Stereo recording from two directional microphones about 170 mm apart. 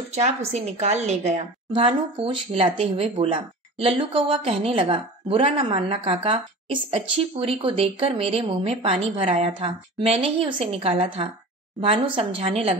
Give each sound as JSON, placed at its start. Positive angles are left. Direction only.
{"t": 0.1, "sound": "speech", "side_deg": -40}
{"t": 1.7, "sound": "speech", "side_deg": -30}